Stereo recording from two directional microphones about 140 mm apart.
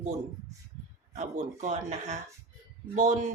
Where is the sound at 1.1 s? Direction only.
60° right (ahead or behind).